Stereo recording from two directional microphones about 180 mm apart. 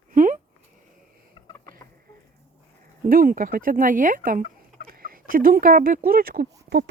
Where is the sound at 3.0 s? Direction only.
50° right (ahead or behind).